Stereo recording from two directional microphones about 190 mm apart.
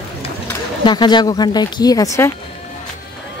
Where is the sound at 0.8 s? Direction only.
20° left (ahead or behind).